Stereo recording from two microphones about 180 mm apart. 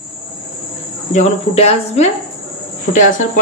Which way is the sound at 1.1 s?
40° left (ahead or behind).